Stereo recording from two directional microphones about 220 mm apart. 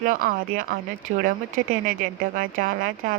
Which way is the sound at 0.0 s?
40° right (ahead or behind).